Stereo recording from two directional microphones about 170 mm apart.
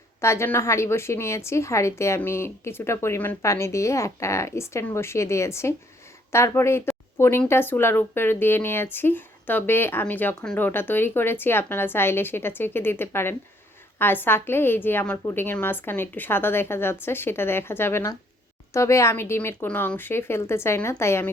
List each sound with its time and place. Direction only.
0.2 s speech: 15° left (ahead or behind)